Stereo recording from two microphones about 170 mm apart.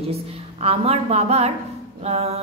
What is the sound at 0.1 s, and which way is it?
A woman's voice, 35° right (ahead or behind).